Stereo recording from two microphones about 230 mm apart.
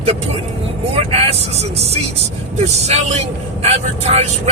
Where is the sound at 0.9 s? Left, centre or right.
Right.